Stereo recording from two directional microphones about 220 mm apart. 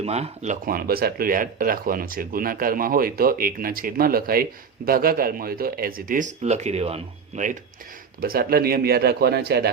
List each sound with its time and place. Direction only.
0.0 s speech: 30° right (ahead or behind)
8.2 s speech: 40° right (ahead or behind)